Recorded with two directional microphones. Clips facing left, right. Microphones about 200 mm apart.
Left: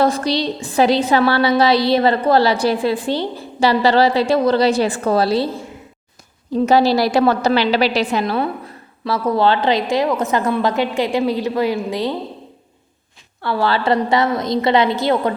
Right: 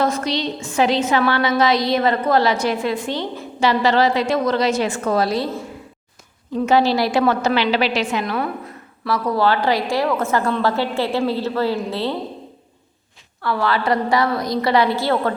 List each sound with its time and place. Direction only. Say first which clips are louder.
0.0 s a woman's voice: left 3 dB; 35° left (ahead or behind)
6.5 s a woman's voice: left 3 dB; 35° left (ahead or behind); by 12.1 s 15° left (ahead or behind)
13.4 s a woman's voice: left 2 dB; 30° left (ahead or behind)